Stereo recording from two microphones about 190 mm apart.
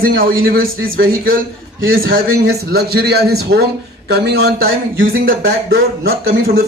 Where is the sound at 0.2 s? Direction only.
50° right (ahead or behind).